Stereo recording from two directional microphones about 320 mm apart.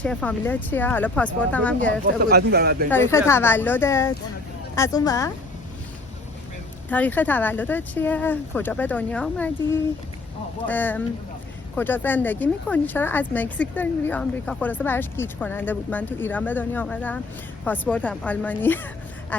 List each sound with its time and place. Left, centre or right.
0.0 s speech: centre
2.3 s speech: right
3.2 s speech: centre
6.9 s speech: centre